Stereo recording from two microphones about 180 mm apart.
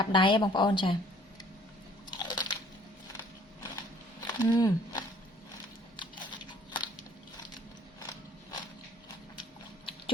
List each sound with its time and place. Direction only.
0.0 s speech: 25° left (ahead or behind)
2.1 s crunch: 25° left (ahead or behind)
4.3 s speech: 20° left (ahead or behind)
6.0 s a sound: 25° left (ahead or behind)